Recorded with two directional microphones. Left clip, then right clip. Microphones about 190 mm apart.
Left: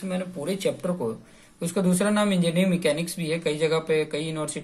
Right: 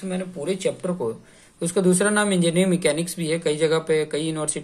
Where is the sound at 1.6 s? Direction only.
20° right (ahead or behind).